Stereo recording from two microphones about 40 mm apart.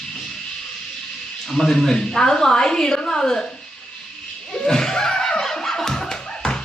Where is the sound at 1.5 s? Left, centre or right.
Centre.